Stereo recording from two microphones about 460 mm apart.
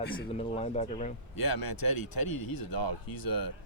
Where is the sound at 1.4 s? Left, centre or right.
Left.